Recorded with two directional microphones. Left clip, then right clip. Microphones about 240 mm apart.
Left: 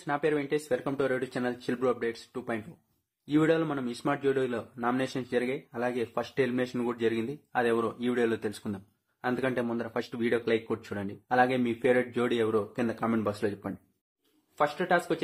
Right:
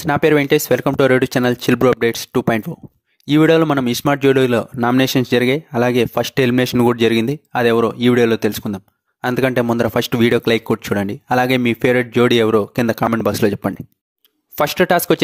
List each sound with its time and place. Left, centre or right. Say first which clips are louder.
0.0 s speech: right 15 dB; right